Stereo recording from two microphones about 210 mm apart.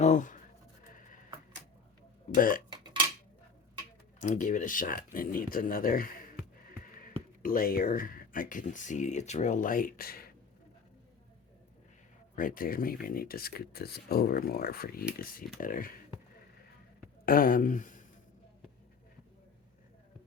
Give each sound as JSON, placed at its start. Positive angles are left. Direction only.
{"t": 0.0, "sound": "speech", "side_deg": 35}
{"t": 2.3, "sound": "speech", "side_deg": 40}
{"t": 4.2, "sound": "speech", "side_deg": 35}
{"t": 12.4, "sound": "speech", "side_deg": 40}
{"t": 17.2, "sound": "a sound", "side_deg": 40}